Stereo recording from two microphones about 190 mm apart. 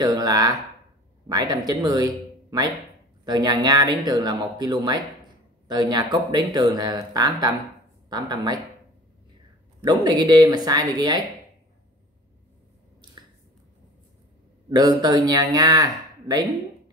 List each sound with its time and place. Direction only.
0.0 s speech: 20° right (ahead or behind)
9.8 s speech: 20° right (ahead or behind)
14.7 s speech: 20° right (ahead or behind)